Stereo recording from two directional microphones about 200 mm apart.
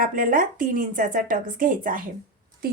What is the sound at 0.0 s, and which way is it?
A woman's voice, 45° right (ahead or behind).